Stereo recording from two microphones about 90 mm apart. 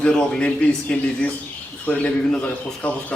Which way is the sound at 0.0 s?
10° left (ahead or behind).